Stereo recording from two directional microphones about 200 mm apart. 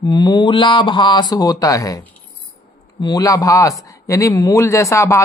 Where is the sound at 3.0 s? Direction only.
20° left (ahead or behind).